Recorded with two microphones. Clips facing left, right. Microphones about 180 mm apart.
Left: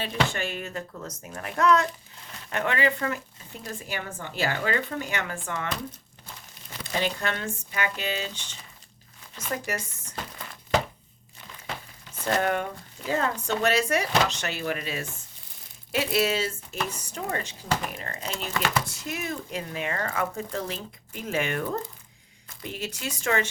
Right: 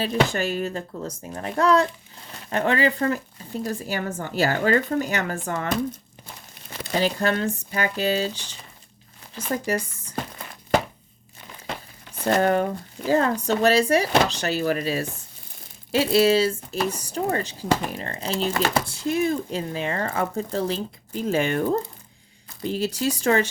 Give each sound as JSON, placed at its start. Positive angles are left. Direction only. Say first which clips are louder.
{"t": 0.0, "sound": "speech", "louder": "right 6 dB", "side_deg": -35}
{"t": 7.0, "sound": "speech", "louder": "right 8 dB", "side_deg": -35}
{"t": 12.2, "sound": "speech", "louder": "right 6 dB", "side_deg": -35}